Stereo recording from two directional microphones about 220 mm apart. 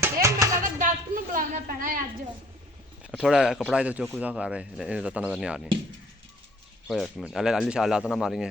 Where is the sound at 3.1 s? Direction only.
Centre (ahead or behind).